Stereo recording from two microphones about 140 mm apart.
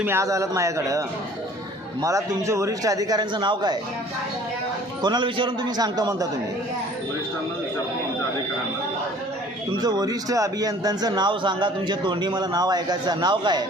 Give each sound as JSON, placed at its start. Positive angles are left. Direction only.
{"t": 0.0, "sound": "a man's voice", "side_deg": -20}
{"t": 5.0, "sound": "a man's voice", "side_deg": -35}
{"t": 9.7, "sound": "a man's voice", "side_deg": -30}